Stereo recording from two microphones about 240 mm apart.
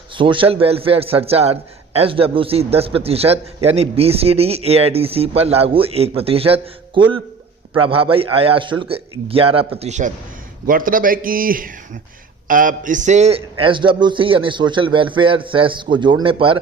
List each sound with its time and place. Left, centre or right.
0.2 s a man's voice: right